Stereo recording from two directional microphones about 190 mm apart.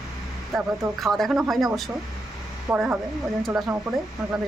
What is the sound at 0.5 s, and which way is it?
A woman's voice, centre (ahead or behind).